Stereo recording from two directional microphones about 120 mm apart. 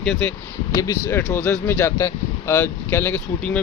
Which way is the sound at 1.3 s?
15° left (ahead or behind).